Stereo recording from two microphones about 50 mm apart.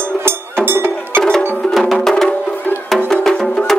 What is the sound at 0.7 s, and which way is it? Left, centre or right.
Music, right.